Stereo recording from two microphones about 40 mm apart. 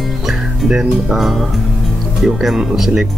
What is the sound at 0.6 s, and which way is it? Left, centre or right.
Speech, centre.